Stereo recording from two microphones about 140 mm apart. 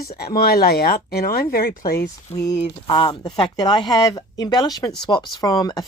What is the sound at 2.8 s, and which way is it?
Speech, 35° left (ahead or behind).